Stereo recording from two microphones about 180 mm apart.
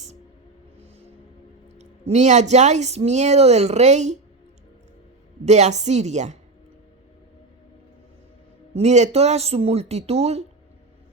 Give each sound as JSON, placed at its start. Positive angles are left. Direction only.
{"t": 1.8, "sound": "speech", "side_deg": -40}
{"t": 5.5, "sound": "speech", "side_deg": -40}
{"t": 8.7, "sound": "speech", "side_deg": -40}